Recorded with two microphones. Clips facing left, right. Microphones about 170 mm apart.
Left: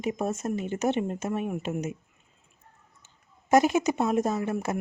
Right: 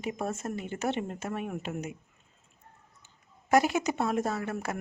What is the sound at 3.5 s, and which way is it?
Speech, 20° left (ahead or behind).